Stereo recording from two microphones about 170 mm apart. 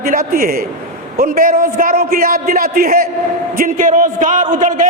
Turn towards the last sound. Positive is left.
turn(degrees=-50)  # may be behind; listen again after turning